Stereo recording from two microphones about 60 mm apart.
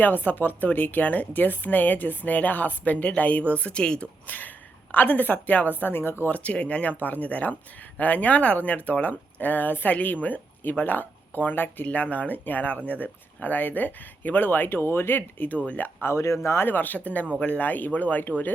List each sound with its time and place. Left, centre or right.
0.0 s speech: left
4.3 s a woman's voice: left
6.2 s speech: left
15.4 s speech: left
16.0 s speech: left
16.6 s speech: left